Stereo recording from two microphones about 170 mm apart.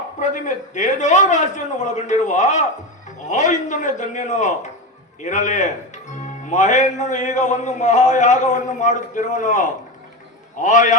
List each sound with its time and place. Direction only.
0.2 s a man's voice: 45° left (ahead or behind)